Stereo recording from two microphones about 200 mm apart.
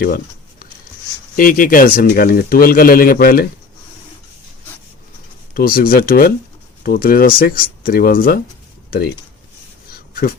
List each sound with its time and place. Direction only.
1.4 s a man's voice: 45° left (ahead or behind)
5.5 s a man's voice: 50° left (ahead or behind)
9.9 s a sound: 50° left (ahead or behind)